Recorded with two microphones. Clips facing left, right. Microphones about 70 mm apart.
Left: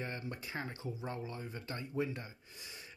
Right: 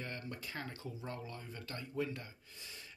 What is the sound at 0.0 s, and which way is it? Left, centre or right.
Speech, left.